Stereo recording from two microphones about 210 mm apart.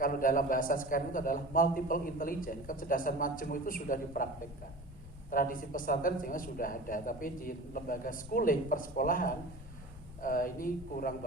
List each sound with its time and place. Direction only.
0.0 s a man's voice: 40° left (ahead or behind)
5.3 s a man's voice: 40° left (ahead or behind)